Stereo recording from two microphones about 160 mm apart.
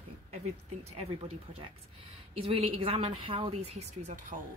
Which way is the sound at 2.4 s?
35° right (ahead or behind).